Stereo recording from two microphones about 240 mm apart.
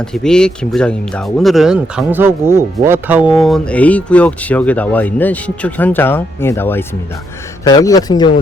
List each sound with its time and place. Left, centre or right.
0.0 s speech: centre